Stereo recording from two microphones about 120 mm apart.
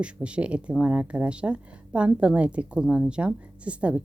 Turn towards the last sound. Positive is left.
turn(degrees=-10)  # may be behind; listen again after turning